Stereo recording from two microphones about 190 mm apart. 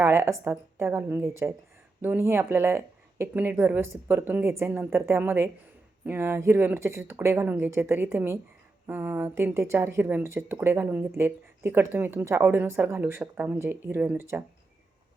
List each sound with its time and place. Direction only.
0.0 s speech: 15° right (ahead or behind)